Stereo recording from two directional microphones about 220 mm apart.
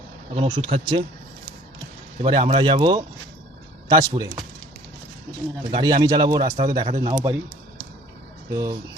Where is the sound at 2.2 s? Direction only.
25° right (ahead or behind).